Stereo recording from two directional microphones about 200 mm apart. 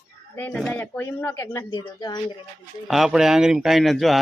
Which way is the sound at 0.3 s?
5° left (ahead or behind).